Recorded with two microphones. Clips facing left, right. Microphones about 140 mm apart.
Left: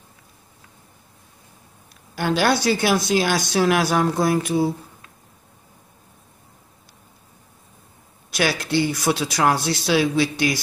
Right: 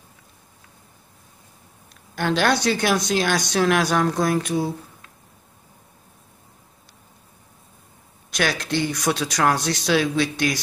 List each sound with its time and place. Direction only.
2.1 s speech: 5° left (ahead or behind)
8.3 s speech: 5° left (ahead or behind)